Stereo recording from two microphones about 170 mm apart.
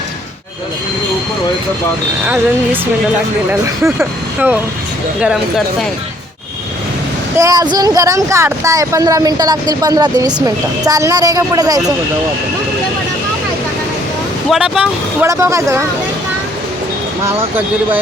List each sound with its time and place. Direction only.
3.5 s speech: 10° right (ahead or behind)
7.3 s speech: 20° right (ahead or behind)
14.5 s speech: 5° right (ahead or behind)
15.3 s speech: 15° right (ahead or behind)
17.2 s speech: 10° right (ahead or behind)